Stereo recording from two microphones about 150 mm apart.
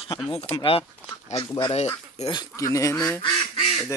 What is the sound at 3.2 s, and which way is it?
Quack, 35° left (ahead or behind).